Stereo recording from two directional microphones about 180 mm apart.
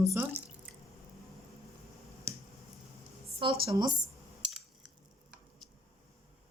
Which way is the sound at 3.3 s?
30° right (ahead or behind).